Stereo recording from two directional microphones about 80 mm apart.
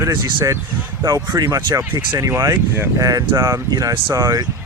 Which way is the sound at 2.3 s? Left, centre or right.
Right.